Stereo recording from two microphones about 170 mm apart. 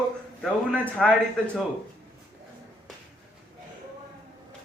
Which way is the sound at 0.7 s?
Centre (ahead or behind).